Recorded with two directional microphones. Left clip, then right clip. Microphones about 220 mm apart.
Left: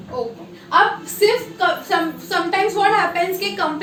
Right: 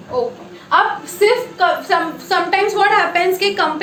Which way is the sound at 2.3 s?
25° right (ahead or behind).